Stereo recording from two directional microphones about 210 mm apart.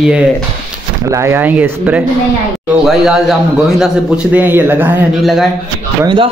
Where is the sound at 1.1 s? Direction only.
15° right (ahead or behind).